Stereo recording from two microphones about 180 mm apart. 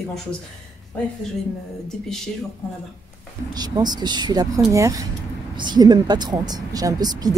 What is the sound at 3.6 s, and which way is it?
A woman's voice, 20° right (ahead or behind).